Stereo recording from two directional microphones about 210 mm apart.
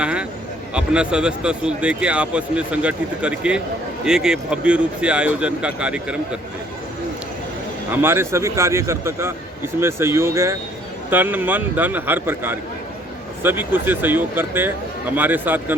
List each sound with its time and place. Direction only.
0.0 s a sound: 5° right (ahead or behind)
0.7 s speech: 5° right (ahead or behind)
7.9 s speech: 10° right (ahead or behind)